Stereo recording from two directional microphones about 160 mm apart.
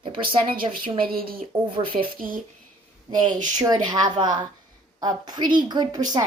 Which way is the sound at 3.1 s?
25° right (ahead or behind).